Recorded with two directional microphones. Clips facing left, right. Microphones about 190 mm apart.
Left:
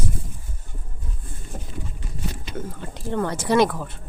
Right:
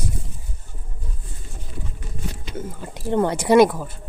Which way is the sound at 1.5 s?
50° left (ahead or behind).